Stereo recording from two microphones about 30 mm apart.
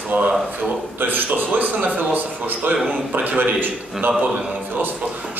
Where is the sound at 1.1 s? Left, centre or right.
Right.